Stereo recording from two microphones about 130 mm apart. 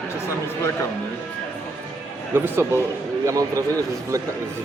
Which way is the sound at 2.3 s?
15° right (ahead or behind).